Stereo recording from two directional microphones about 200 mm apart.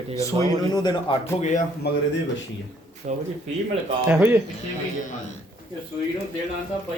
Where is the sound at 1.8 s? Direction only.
55° left (ahead or behind).